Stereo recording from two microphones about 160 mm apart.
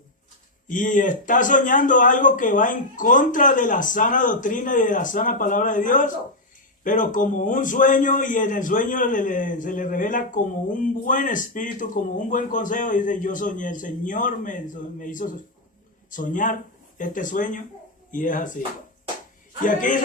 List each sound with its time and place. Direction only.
0.7 s a man's voice: 55° left (ahead or behind)
19.6 s a man's voice: 55° left (ahead or behind)